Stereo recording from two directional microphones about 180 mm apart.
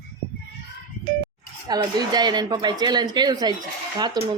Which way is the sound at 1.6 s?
25° right (ahead or behind).